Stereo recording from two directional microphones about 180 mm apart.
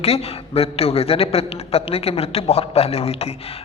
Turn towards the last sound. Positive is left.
turn(degrees=35)  # may be behind; listen again after turning